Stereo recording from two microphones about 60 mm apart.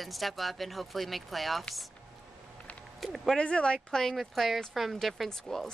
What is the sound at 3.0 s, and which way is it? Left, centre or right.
Speech, centre.